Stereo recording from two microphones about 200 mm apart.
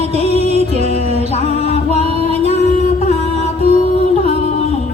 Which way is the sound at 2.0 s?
30° right (ahead or behind).